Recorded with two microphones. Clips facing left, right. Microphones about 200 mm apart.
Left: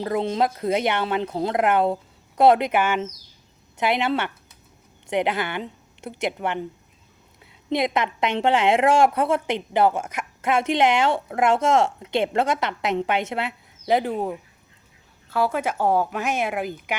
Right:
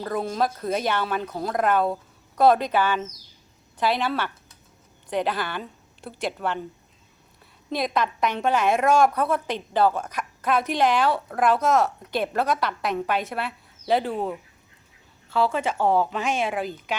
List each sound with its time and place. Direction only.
0.0 s a woman's voice: 20° left (ahead or behind)
7.7 s a woman's voice: 20° left (ahead or behind)